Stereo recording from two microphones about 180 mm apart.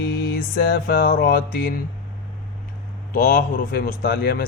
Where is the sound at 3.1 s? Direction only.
55° left (ahead or behind).